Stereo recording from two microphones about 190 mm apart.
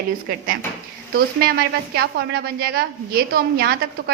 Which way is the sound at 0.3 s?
50° right (ahead or behind).